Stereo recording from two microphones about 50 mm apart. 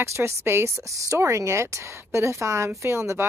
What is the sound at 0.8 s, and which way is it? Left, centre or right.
Speech, right.